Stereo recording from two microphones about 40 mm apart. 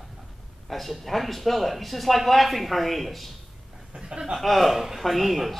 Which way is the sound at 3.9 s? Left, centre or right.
Centre.